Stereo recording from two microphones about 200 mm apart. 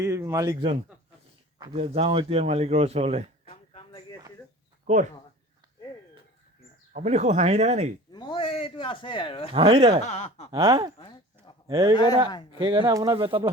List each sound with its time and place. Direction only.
0.0 s a man's voice: 15° right (ahead or behind)
1.5 s speech: 20° right (ahead or behind)
3.5 s a sound: 25° left (ahead or behind)
4.9 s speech: 35° right (ahead or behind)
6.9 s speech: 35° right (ahead or behind)
8.1 s speech: 25° left (ahead or behind)
9.5 s speech: 25° right (ahead or behind)
10.0 s speech: 35° left (ahead or behind)
10.5 s a man's voice: 15° right (ahead or behind)
11.9 s speech: 20° left (ahead or behind)
12.5 s speech: 25° right (ahead or behind)